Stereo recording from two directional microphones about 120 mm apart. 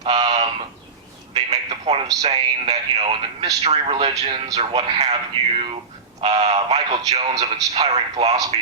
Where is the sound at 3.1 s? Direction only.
40° right (ahead or behind).